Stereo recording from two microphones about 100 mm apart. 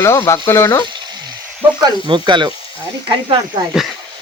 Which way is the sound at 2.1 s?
50° right (ahead or behind).